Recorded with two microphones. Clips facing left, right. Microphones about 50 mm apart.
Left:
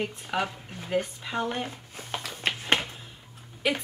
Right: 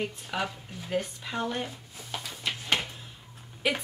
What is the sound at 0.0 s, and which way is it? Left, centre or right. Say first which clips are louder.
Speech: left 2 dB; centre.